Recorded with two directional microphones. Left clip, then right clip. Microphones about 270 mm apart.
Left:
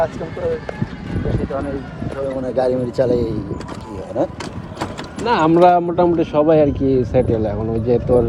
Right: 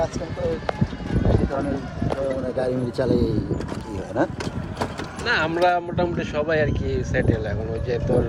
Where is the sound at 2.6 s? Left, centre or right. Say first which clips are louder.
Left 8 dB; centre.